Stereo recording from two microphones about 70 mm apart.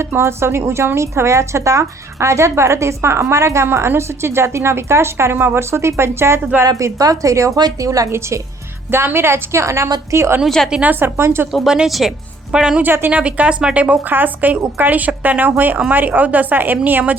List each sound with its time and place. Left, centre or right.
0.0 s a woman's voice: right
6.7 s a woman's voice: right
8.9 s a woman's voice: right
10.7 s a woman's voice: centre
11.0 s a woman's voice: right
11.5 s a woman's voice: centre
12.8 s speech: right